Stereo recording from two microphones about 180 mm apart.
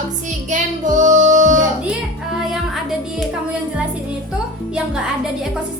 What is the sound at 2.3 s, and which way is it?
Music, centre (ahead or behind).